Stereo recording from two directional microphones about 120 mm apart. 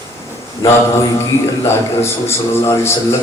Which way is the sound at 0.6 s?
25° left (ahead or behind).